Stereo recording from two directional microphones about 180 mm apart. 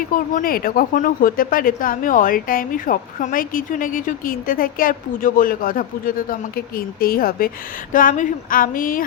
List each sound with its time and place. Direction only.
0.1 s speech: 50° left (ahead or behind)